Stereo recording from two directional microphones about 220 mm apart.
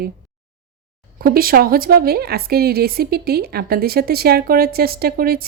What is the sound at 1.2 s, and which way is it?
A woman's voice, 40° right (ahead or behind).